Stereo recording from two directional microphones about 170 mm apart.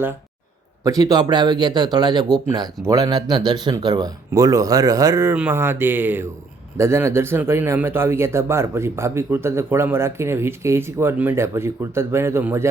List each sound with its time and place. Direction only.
0.9 s speech: 20° right (ahead or behind)